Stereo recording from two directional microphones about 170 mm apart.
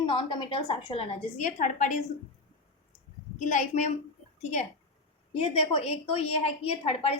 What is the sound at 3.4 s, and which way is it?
Speech, 45° left (ahead or behind).